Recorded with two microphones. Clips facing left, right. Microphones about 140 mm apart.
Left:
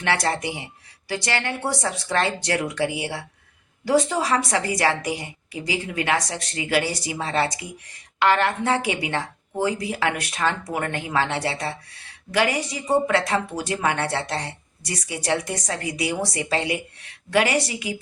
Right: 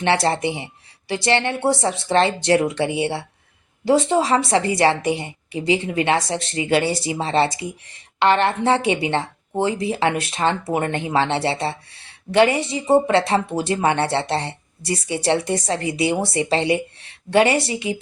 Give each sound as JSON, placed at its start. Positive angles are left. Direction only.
{"t": 0.0, "sound": "speech", "side_deg": -25}